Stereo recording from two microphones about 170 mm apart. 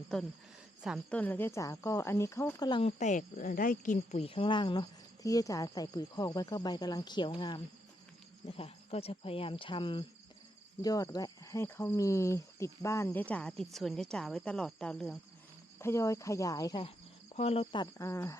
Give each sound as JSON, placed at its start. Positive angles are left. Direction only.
{"t": 0.1, "sound": "a woman's voice", "side_deg": 5}
{"t": 1.1, "sound": "speech", "side_deg": 10}
{"t": 2.6, "sound": "cricket", "side_deg": 30}
{"t": 3.0, "sound": "speech", "side_deg": 45}
{"t": 4.2, "sound": "speech", "side_deg": 30}
{"t": 8.4, "sound": "cricket", "side_deg": 35}
{"t": 10.8, "sound": "speech", "side_deg": 20}
{"t": 15.8, "sound": "speech", "side_deg": 15}
{"t": 17.3, "sound": "cricket", "side_deg": 35}
{"t": 17.9, "sound": "speech", "side_deg": 15}